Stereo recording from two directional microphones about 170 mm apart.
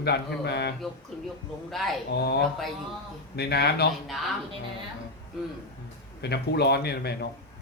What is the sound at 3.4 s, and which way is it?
Speech, 70° left (ahead or behind).